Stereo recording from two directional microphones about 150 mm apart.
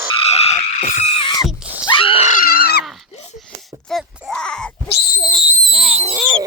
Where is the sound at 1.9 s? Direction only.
35° left (ahead or behind).